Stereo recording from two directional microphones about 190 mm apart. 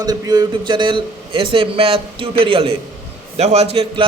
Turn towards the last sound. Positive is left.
turn(degrees=-30)  # may be behind; listen again after turning